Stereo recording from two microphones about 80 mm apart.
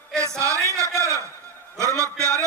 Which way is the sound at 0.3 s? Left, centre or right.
Right.